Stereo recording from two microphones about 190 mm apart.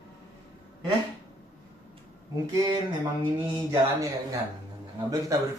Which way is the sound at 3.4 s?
15° right (ahead or behind).